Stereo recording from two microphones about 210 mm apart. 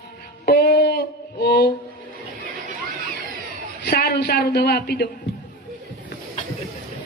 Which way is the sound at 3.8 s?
50° left (ahead or behind).